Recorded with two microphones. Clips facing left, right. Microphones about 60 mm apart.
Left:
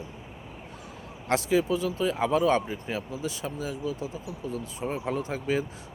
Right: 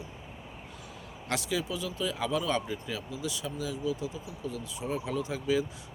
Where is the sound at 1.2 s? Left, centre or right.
Left.